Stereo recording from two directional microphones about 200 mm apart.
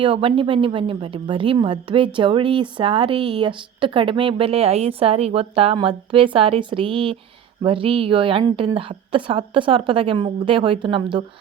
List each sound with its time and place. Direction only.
0.0 s a woman's voice: 25° right (ahead or behind)